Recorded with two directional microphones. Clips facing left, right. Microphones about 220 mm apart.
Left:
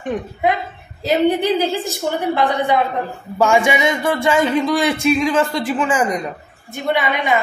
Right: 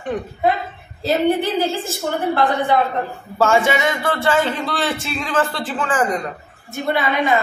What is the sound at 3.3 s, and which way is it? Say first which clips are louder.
Speech: left 1 dB; 15° left (ahead or behind).